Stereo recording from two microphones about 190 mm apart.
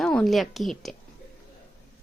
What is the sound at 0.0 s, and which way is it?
Speech, 5° left (ahead or behind).